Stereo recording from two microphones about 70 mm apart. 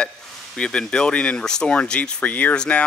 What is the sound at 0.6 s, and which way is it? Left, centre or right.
Speech, centre.